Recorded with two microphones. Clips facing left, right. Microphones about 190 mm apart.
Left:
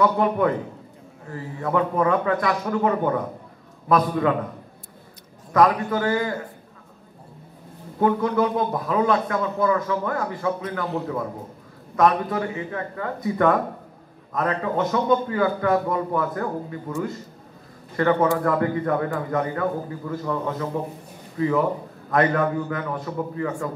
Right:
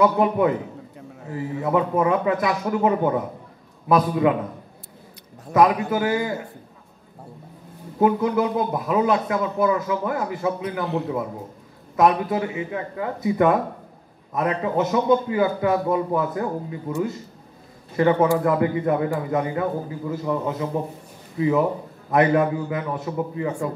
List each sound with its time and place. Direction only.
0.0 s speech: 15° right (ahead or behind)
5.5 s speech: 20° right (ahead or behind)
8.0 s speech: 15° right (ahead or behind)
12.0 s a man's voice: 15° right (ahead or behind)